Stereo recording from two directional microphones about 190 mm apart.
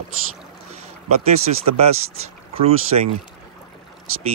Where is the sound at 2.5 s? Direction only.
30° right (ahead or behind).